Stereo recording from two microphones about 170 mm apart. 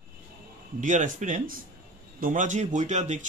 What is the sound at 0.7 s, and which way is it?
A man's voice, 50° right (ahead or behind).